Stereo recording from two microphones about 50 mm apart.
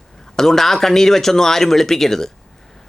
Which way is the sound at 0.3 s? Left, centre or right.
Centre.